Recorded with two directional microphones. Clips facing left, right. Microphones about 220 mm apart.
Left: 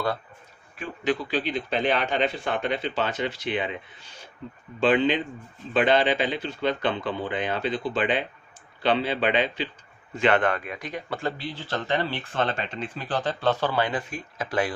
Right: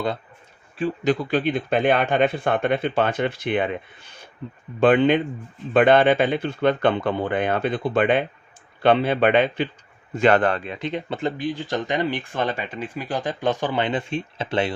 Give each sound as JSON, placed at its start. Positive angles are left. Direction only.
{"t": 1.2, "sound": "speech", "side_deg": -55}
{"t": 10.2, "sound": "speech", "side_deg": -40}